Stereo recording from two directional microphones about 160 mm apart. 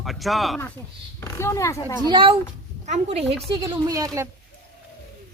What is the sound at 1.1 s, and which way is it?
Speech, 15° left (ahead or behind).